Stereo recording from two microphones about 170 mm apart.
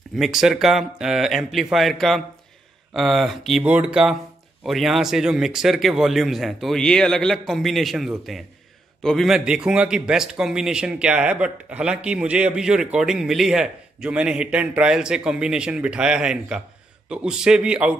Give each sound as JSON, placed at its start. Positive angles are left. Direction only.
{"t": 0.1, "sound": "a man's voice", "side_deg": 0}